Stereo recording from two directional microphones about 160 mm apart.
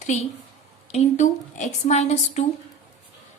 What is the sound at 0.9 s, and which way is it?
A woman's voice, 45° left (ahead or behind).